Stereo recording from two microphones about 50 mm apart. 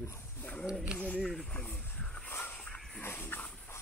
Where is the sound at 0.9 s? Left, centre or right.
Centre.